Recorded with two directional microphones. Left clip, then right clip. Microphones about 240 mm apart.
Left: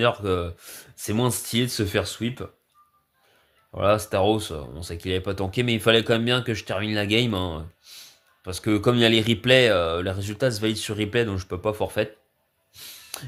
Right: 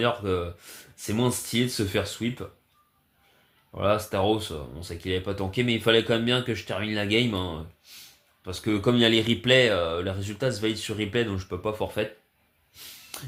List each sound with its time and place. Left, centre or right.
0.0 s speech: left
3.7 s speech: left
12.7 s a sound: left